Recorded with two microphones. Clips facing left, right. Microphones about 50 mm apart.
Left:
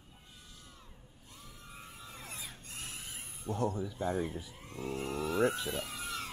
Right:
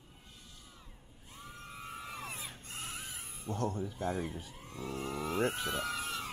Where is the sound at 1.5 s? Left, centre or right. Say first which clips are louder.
Right 7 dB; right.